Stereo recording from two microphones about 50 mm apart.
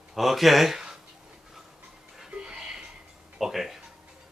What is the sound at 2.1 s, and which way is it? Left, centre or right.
Music, centre.